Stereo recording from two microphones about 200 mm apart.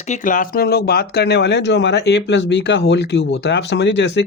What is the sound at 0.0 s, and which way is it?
Speech, 40° left (ahead or behind).